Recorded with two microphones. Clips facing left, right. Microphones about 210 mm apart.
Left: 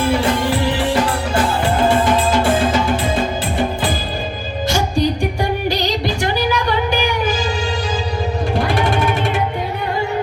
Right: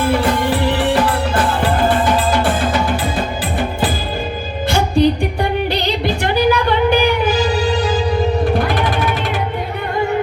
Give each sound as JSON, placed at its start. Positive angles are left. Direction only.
{"t": 4.7, "sound": "music", "side_deg": -55}
{"t": 8.6, "sound": "music", "side_deg": 25}